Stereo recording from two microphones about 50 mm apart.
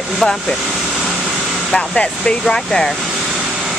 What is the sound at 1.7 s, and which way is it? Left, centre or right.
Speech, centre.